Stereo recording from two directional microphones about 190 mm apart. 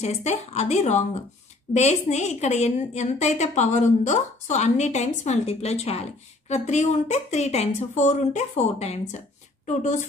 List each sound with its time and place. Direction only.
0.0 s a woman's voice: 35° left (ahead or behind)